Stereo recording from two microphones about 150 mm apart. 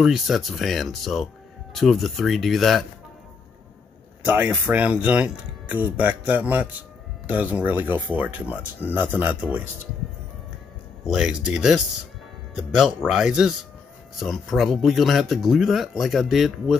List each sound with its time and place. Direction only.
0.0 s speech: centre (ahead or behind)
4.2 s speech: 10° right (ahead or behind)
11.1 s speech: 5° right (ahead or behind)